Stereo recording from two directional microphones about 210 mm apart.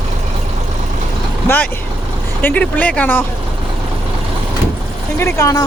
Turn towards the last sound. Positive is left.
turn(degrees=15)  # may be behind; listen again after turning